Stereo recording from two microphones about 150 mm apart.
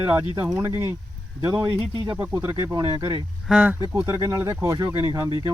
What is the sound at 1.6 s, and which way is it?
Speech, 30° right (ahead or behind).